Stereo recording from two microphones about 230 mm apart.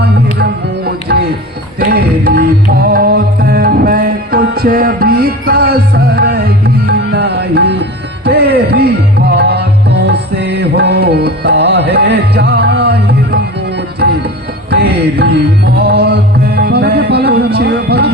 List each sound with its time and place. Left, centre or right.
1.1 s music: right
8.2 s tabla: right
14.7 s music: right